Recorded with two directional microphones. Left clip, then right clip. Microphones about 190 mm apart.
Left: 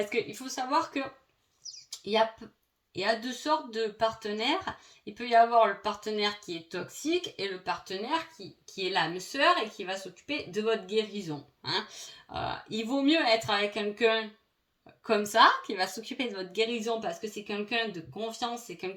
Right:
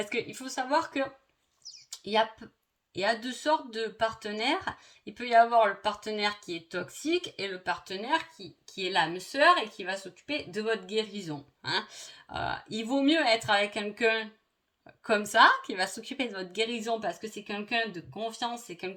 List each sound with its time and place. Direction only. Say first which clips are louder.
0.1 s speech: left 1 dB; 40° right (ahead or behind)
2.9 s speech: even; 40° right (ahead or behind)